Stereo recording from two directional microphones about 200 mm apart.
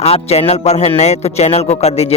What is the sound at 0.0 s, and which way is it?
A man's voice, 30° left (ahead or behind).